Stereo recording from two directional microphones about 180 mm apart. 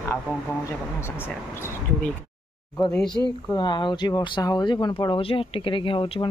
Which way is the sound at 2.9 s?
5° left (ahead or behind).